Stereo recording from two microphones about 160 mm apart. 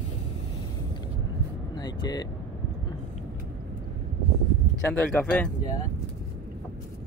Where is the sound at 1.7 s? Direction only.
25° left (ahead or behind).